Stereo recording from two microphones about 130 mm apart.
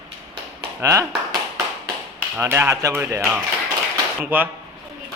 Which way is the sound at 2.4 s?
20° right (ahead or behind).